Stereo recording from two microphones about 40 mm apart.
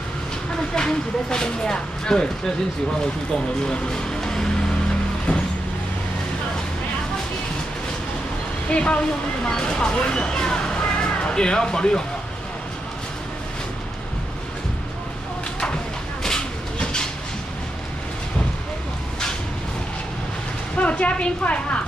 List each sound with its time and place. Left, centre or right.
0.7 s speech: centre
3.6 s speech: centre
5.3 s vehicle: left
8.6 s a woman's voice: left
16.2 s train: centre
20.7 s a woman's voice: left